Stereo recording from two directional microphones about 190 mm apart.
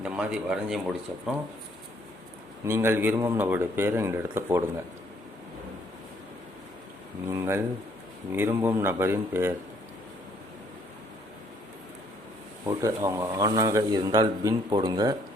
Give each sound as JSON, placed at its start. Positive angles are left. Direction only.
{"t": 0.0, "sound": "speech", "side_deg": -5}
{"t": 2.6, "sound": "speech", "side_deg": -10}
{"t": 7.3, "sound": "speech", "side_deg": -15}
{"t": 12.6, "sound": "speech", "side_deg": -15}